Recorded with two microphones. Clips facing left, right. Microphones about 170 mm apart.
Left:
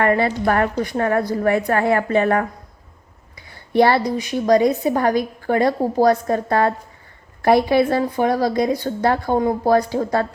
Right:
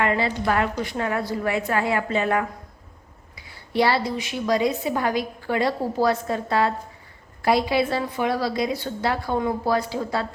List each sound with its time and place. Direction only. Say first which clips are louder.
0.0 s a woman's voice: left 5 dB; 50° left (ahead or behind)
3.7 s a woman's voice: left 6 dB; 55° left (ahead or behind)